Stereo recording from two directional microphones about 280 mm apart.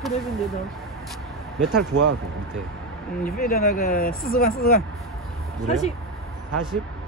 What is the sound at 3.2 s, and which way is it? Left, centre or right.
Speech, left.